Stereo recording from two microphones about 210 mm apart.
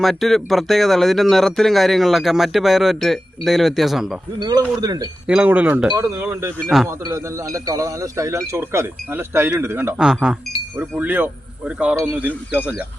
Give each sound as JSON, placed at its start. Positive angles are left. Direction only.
{"t": 0.0, "sound": "speech", "side_deg": 0}
{"t": 4.4, "sound": "a man's voice", "side_deg": -20}
{"t": 5.3, "sound": "speech", "side_deg": -5}